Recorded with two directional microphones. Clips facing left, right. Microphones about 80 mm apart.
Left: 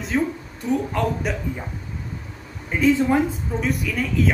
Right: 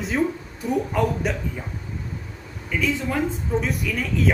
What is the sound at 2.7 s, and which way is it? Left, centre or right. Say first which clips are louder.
Speech: left 6 dB; left.